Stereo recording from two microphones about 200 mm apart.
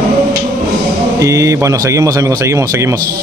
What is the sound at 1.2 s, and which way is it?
A man's voice, 15° right (ahead or behind).